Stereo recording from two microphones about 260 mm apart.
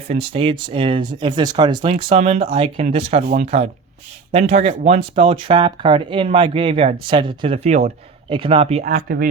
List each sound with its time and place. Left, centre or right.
0.1 s speech: right
8.8 s speech: right